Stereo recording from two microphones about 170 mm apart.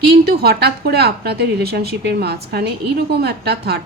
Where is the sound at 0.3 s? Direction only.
70° right (ahead or behind).